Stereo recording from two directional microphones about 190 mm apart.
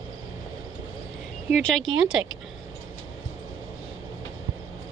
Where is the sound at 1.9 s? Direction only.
90° right.